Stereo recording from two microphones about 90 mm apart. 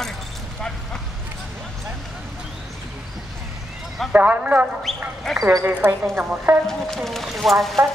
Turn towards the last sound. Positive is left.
turn(degrees=0)  # may be behind; listen again after turning